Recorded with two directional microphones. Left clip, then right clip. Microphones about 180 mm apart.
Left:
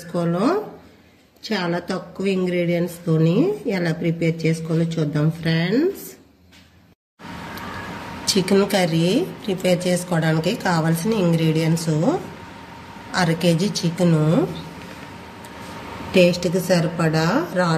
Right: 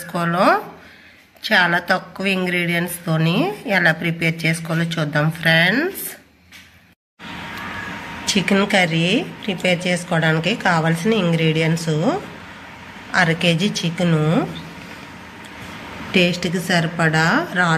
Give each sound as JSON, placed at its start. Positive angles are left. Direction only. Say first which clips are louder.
{"t": 0.1, "sound": "a woman's voice", "louder": "right 5 dB", "side_deg": 15}
{"t": 8.3, "sound": "a woman's voice", "louder": "right 1 dB", "side_deg": 5}
{"t": 11.7, "sound": "speech", "louder": "right 1 dB", "side_deg": -15}
{"t": 13.1, "sound": "a woman's voice", "louder": "right 3 dB", "side_deg": 5}
{"t": 16.1, "sound": "a woman's voice", "louder": "left 2 dB", "side_deg": 0}